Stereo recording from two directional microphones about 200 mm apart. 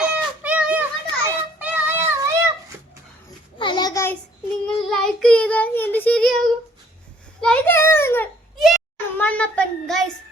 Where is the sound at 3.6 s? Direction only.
20° left (ahead or behind).